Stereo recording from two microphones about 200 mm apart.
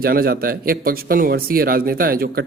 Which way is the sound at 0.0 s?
50° right (ahead or behind).